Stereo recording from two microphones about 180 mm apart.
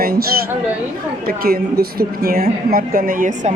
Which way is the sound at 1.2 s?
55° right (ahead or behind).